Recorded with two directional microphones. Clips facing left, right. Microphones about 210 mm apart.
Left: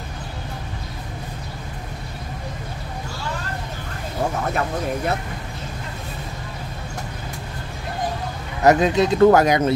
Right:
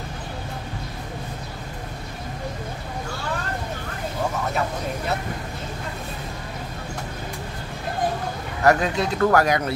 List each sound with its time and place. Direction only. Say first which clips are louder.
8.6 s speech: left 4 dB; 20° left (ahead or behind)